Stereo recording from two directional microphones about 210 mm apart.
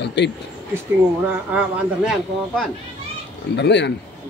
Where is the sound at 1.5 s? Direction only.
5° right (ahead or behind).